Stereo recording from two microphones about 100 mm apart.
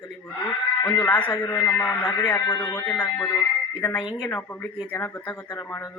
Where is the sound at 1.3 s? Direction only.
35° left (ahead or behind).